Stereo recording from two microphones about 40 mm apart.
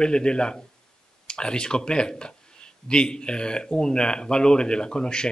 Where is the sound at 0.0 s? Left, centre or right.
Left.